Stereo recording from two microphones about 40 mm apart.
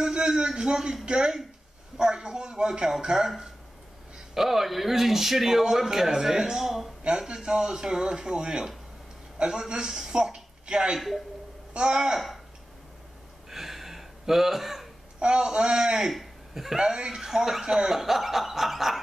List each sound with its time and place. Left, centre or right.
0.0 s a man's voice: centre
4.3 s speech: centre
11.0 s a man's voice: centre
11.7 s speech: centre
13.5 s a sound: centre
15.1 s speech: right
16.1 s speech: centre